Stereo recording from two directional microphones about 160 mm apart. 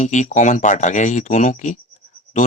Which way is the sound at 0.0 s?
50° left (ahead or behind).